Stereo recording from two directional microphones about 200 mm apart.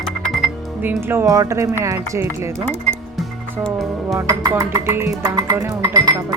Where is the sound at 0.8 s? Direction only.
10° right (ahead or behind).